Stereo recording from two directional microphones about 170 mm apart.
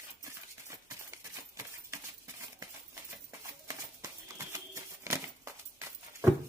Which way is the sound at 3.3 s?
20° right (ahead or behind).